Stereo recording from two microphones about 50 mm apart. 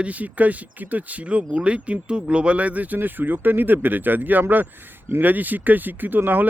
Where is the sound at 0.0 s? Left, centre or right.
Right.